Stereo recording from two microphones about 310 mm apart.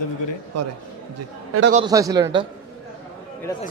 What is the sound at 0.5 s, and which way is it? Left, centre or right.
Speech, right.